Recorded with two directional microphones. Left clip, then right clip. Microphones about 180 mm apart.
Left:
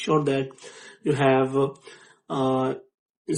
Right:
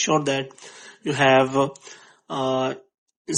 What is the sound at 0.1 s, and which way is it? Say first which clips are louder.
Speech: right 1 dB; 30° right (ahead or behind).